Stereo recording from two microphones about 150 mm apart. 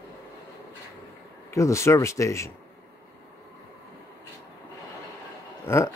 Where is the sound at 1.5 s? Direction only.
20° left (ahead or behind).